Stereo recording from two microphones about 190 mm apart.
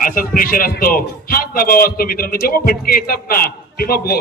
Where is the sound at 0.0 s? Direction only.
45° left (ahead or behind).